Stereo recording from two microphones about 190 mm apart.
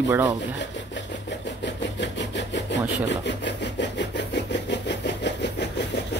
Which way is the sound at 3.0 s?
65° left (ahead or behind).